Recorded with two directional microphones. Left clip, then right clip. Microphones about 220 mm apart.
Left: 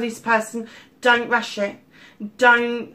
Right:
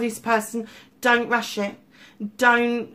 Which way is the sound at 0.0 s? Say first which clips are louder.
Left 2 dB; 45° right (ahead or behind).